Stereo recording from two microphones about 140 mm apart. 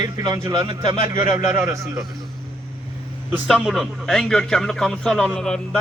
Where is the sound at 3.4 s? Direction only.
Centre (ahead or behind).